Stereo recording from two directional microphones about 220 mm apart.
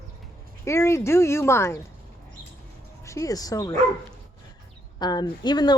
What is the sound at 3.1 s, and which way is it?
Speech, 15° left (ahead or behind).